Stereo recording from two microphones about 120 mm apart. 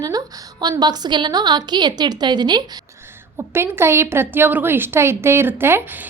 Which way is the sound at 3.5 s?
20° right (ahead or behind).